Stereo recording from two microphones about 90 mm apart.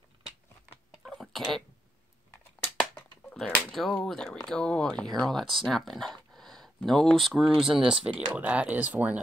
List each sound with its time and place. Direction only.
1.0 s a sound: centre (ahead or behind)
3.3 s speech: 5° left (ahead or behind)
8.3 s speech: 15° right (ahead or behind)